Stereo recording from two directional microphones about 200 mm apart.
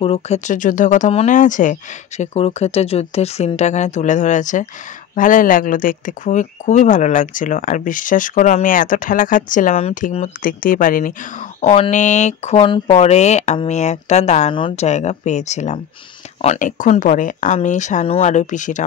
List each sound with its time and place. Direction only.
0.0 s speech: 30° left (ahead or behind)
11.6 s speech: 35° left (ahead or behind)